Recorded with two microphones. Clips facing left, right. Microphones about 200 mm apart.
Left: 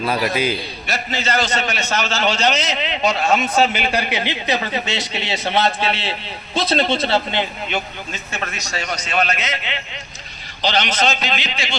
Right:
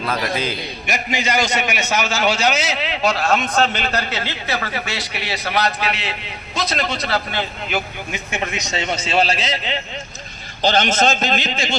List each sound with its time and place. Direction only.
0.1 s a man's voice: 15° left (ahead or behind)
0.9 s a man's voice: 15° right (ahead or behind)
3.2 s a man's voice: 5° left (ahead or behind); by 7.4 s 25° left (ahead or behind)
8.1 s a man's voice: 15° right (ahead or behind); by 9.8 s 35° right (ahead or behind)
10.6 s a man's voice: 45° right (ahead or behind)